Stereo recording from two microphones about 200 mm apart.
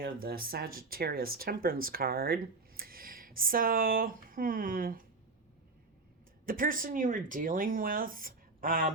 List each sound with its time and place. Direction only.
0.0 s speech: 50° right (ahead or behind)
6.4 s speech: 45° right (ahead or behind)